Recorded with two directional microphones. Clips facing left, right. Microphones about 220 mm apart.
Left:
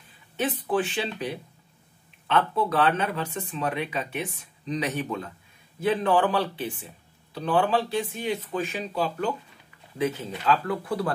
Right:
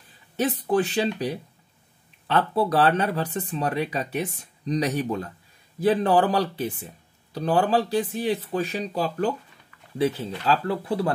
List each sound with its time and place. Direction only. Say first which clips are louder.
0.4 s speech: right 3 dB; 40° right (ahead or behind)